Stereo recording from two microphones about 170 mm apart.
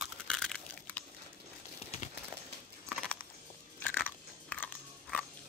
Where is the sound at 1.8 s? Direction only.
35° left (ahead or behind).